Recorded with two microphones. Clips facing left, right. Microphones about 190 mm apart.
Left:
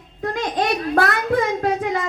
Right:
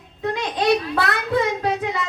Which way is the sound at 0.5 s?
50° left (ahead or behind).